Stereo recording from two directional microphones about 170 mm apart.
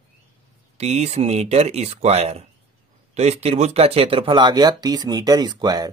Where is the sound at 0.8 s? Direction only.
40° right (ahead or behind).